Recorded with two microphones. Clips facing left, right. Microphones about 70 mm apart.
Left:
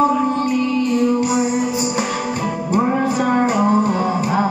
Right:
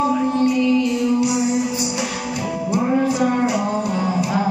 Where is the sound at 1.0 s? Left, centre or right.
Left.